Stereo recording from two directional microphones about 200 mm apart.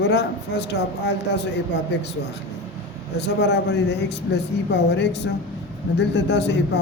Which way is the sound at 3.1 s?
55° left (ahead or behind).